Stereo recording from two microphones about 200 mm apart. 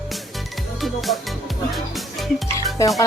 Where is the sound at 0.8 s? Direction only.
Centre (ahead or behind).